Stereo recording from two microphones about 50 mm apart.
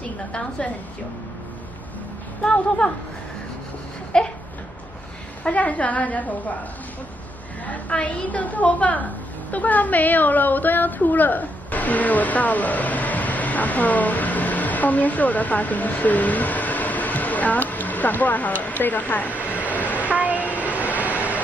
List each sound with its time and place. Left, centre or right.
0.3 s a woman's voice: centre
2.4 s a woman's voice: centre
4.1 s a woman's voice: centre
5.4 s a woman's voice: left
7.6 s a woman's voice: left
20.2 s a sound: right
20.7 s vehicle: right